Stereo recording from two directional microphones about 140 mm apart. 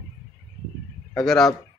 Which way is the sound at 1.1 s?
Centre (ahead or behind).